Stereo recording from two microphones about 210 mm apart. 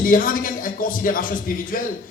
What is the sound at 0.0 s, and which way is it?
A man's voice, 40° left (ahead or behind).